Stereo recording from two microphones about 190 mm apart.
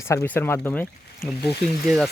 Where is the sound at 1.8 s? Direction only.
Centre (ahead or behind).